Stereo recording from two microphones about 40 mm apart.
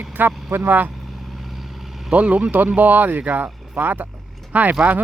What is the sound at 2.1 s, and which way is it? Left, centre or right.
Speech, right.